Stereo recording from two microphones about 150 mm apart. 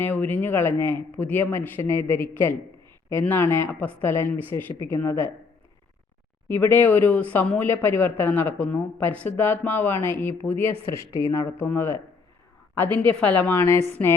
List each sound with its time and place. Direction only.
0.0 s speech: 10° left (ahead or behind)
6.5 s a woman's voice: 15° left (ahead or behind)
13.7 s speech: 45° right (ahead or behind)